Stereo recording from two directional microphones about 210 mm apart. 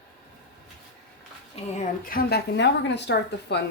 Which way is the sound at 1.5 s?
40° left (ahead or behind).